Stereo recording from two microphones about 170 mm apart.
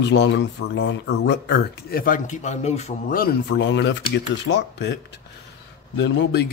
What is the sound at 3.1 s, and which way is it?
Speech, 65° left (ahead or behind).